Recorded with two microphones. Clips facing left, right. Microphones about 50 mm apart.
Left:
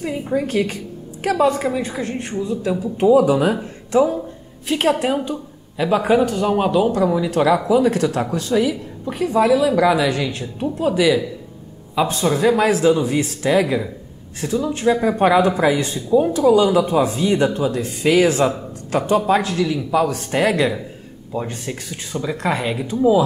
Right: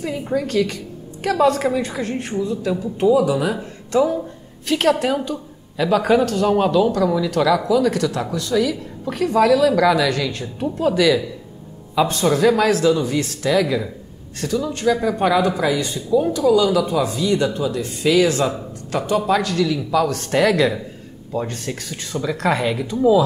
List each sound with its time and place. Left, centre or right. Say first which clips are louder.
0.3 s speech: left 1 dB; centre
0.6 s a sound: right 1 dB; left
1.4 s a woman's voice: right 2 dB; centre
2.3 s speech: left 1 dB; left
2.8 s speech: left 3 dB; left
3.5 s speech: left 2 dB; centre
6.9 s speech: left 1 dB; left
18.2 s speech: left 2 dB; left